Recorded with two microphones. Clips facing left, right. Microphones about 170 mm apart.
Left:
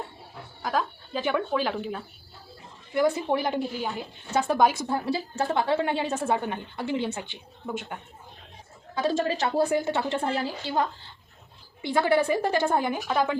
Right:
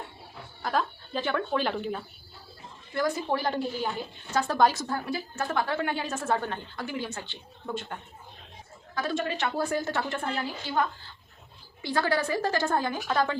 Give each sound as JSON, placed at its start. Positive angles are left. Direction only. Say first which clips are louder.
{"t": 0.6, "sound": "speech", "louder": "left 1 dB", "side_deg": 5}
{"t": 2.9, "sound": "a woman's voice", "louder": "left 4 dB", "side_deg": 20}
{"t": 7.1, "sound": "speech", "louder": "left 4 dB", "side_deg": 15}
{"t": 9.0, "sound": "a woman's voice", "louder": "left 4 dB", "side_deg": 30}
{"t": 9.6, "sound": "a woman's voice", "louder": "left 4 dB", "side_deg": 15}